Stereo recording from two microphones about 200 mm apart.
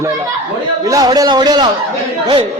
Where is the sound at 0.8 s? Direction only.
15° right (ahead or behind).